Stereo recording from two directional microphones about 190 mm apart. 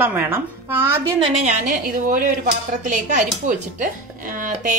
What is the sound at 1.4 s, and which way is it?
Speech, 45° right (ahead or behind).